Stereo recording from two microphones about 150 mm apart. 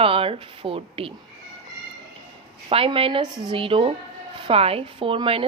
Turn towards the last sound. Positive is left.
turn(degrees=-35)  # may be behind; listen again after turning